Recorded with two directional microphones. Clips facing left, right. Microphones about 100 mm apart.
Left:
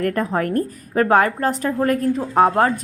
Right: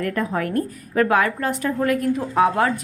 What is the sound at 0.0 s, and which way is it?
A woman's voice, 40° left (ahead or behind).